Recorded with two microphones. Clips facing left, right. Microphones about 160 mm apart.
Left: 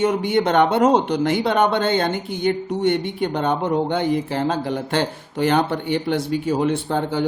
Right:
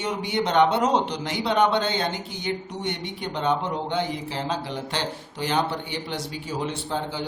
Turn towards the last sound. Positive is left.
turn(degrees=55)  # may be behind; listen again after turning